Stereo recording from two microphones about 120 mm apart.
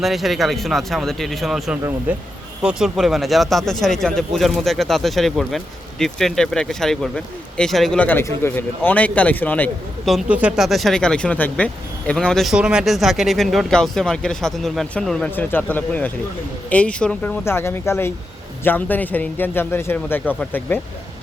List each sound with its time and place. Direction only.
0.0 s speech: centre (ahead or behind)
2.1 s a man's voice: 15° right (ahead or behind); by 9.6 s 15° left (ahead or behind)
10.1 s a man's voice: 5° right (ahead or behind); by 17.3 s 10° left (ahead or behind)
17.4 s a man's voice: 20° left (ahead or behind)